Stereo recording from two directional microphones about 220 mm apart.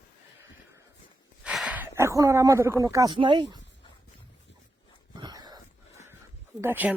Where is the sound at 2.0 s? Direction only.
15° right (ahead or behind).